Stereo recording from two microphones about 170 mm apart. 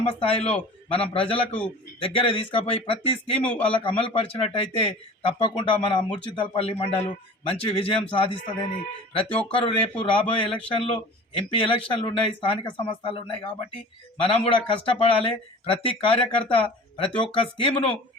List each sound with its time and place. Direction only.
0.1 s speech: 35° left (ahead or behind)